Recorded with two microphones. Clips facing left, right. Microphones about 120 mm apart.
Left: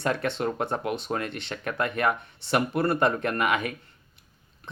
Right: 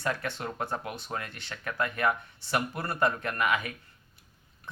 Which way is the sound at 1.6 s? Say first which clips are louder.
Left 3 dB; 25° left (ahead or behind).